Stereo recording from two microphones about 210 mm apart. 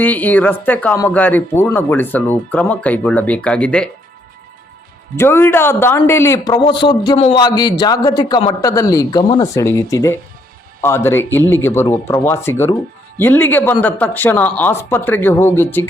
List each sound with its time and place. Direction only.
0.0 s speech: 10° left (ahead or behind)
5.1 s a man's voice: 10° left (ahead or behind)